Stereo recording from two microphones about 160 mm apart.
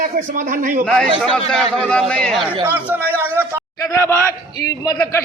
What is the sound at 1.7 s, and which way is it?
Speech, 5° left (ahead or behind).